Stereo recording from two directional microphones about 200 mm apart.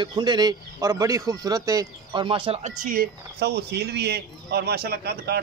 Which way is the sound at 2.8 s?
50° right (ahead or behind).